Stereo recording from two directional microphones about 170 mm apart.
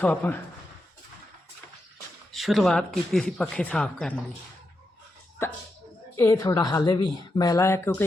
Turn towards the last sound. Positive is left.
turn(degrees=15)  # may be behind; listen again after turning